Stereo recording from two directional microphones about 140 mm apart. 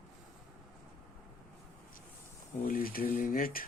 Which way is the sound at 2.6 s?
90° left.